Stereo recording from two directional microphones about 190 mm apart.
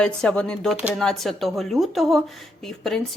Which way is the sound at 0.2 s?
5° left (ahead or behind).